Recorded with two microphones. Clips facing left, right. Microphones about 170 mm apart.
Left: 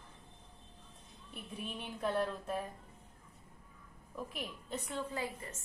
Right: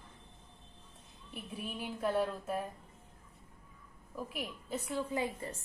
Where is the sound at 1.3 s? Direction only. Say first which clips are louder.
Right 2 dB; 5° right (ahead or behind).